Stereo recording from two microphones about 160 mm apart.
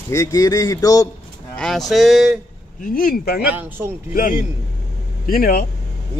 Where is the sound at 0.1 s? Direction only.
20° left (ahead or behind).